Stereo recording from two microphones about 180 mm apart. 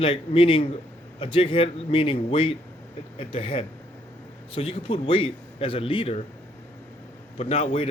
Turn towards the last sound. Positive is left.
turn(degrees=35)  # may be behind; listen again after turning